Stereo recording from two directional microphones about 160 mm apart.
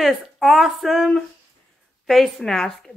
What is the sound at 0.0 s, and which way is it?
Speech, centre (ahead or behind).